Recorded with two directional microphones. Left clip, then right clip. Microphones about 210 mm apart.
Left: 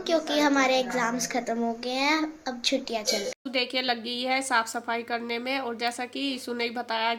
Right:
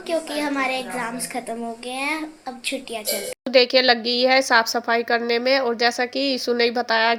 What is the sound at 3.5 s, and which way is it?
A woman's voice, 30° right (ahead or behind).